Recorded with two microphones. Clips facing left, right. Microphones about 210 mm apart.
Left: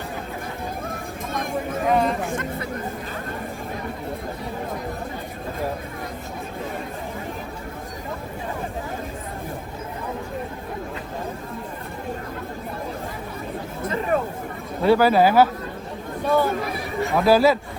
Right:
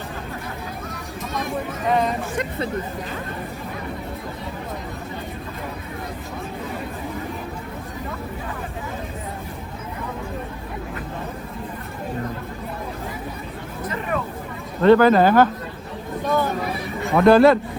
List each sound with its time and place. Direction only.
1.9 s speech: centre (ahead or behind)
13.8 s hubbub: 30° left (ahead or behind)
14.8 s speech: 5° left (ahead or behind)
16.2 s a sound: 10° left (ahead or behind)
17.2 s speech: 5° left (ahead or behind)